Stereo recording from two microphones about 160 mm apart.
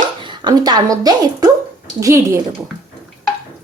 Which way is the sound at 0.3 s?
25° right (ahead or behind).